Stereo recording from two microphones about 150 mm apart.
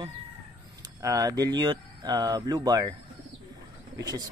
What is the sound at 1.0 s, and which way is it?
Speech, 25° right (ahead or behind).